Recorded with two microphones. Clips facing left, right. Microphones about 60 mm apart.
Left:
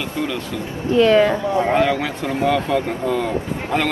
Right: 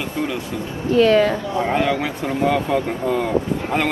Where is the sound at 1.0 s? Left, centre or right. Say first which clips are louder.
Left 1 dB; left.